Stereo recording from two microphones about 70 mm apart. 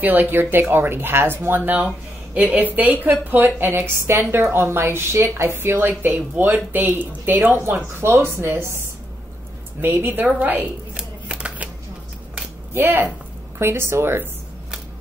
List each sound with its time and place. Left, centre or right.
0.0 s a woman's voice: right
2.3 s a woman's voice: right
10.2 s shuffling cards: right
12.7 s a woman's voice: right